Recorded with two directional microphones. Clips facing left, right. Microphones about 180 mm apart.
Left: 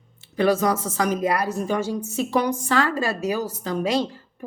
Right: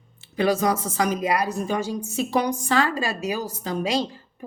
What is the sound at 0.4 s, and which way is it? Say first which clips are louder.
A woman's voice: left 1 dB; 15° right (ahead or behind).